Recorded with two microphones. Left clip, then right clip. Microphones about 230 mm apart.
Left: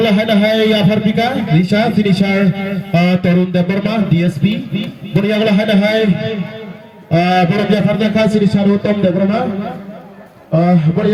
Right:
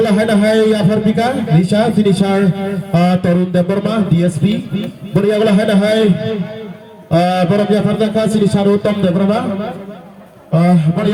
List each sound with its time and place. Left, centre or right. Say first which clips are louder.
0.0 s a man's voice: even; right
10.6 s a man's voice: left 1 dB; right